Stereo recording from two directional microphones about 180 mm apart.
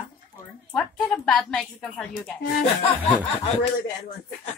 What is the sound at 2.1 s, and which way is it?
Speech, 55° left (ahead or behind).